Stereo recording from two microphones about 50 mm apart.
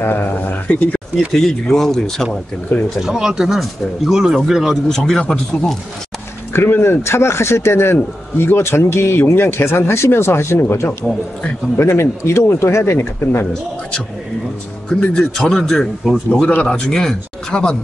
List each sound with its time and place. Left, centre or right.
0.0 s speech: left
0.7 s speech: left
1.3 s a man's voice: centre
3.0 s speech: centre
4.8 s a man's voice: centre
6.5 s a man's voice: left
14.9 s a man's voice: centre